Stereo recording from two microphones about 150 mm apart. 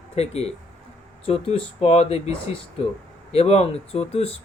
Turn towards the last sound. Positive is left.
turn(degrees=40)  # may be behind; listen again after turning